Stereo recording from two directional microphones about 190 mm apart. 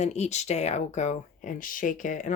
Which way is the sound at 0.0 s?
35° left (ahead or behind).